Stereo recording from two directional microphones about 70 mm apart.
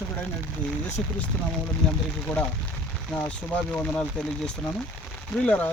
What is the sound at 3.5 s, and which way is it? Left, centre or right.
Speech, centre.